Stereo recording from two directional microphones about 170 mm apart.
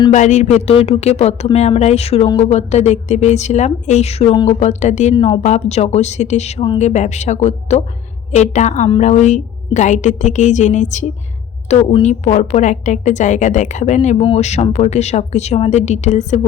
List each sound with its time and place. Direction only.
0.1 s a woman's voice: 45° left (ahead or behind)
5.1 s a woman's voice: 30° left (ahead or behind)